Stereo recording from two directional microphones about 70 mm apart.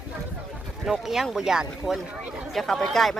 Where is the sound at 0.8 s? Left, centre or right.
Centre.